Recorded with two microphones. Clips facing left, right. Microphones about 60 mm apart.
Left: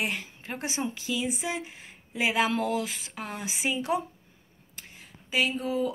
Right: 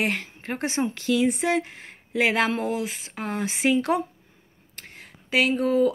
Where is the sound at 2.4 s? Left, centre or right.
Right.